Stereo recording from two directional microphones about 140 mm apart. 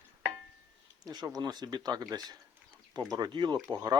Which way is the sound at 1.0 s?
30° right (ahead or behind).